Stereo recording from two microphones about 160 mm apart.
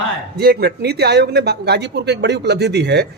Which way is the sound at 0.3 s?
85° right.